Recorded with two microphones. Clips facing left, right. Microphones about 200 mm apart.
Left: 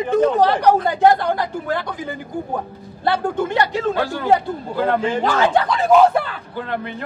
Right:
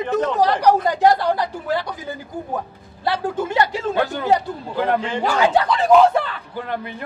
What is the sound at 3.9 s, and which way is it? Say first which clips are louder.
A man's voice: right 1 dB; 20° right (ahead or behind).